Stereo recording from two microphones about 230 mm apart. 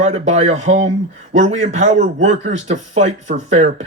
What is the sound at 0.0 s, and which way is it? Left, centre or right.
A man's voice, right.